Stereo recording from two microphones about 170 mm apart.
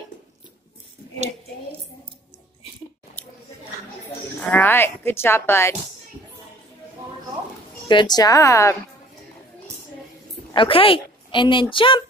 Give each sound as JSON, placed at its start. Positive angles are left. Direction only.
{"t": 3.2, "sound": "a sound", "side_deg": 10}
{"t": 4.4, "sound": "speech", "side_deg": 10}
{"t": 7.9, "sound": "speech", "side_deg": 25}
{"t": 10.5, "sound": "a woman's voice", "side_deg": 30}